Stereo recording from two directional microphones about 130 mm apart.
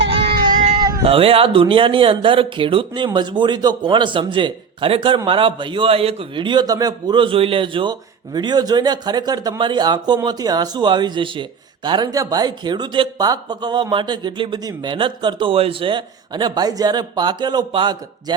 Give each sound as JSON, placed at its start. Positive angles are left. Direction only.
{"t": 0.8, "sound": "cat", "side_deg": -30}
{"t": 1.0, "sound": "speech", "side_deg": -45}